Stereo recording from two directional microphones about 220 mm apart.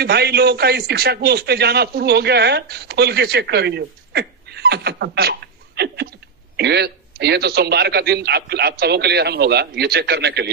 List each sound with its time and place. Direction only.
0.0 s a man's voice: 45° right (ahead or behind)